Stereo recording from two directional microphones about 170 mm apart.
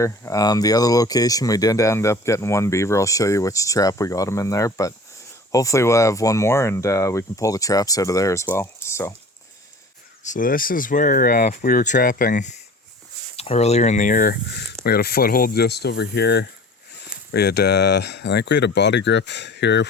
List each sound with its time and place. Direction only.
0.0 s speech: 20° left (ahead or behind)
10.2 s speech: 55° left (ahead or behind)
13.3 s speech: 35° left (ahead or behind); by 19.9 s 90° left